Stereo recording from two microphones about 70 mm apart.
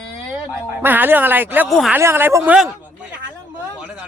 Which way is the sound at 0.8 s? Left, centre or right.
Right.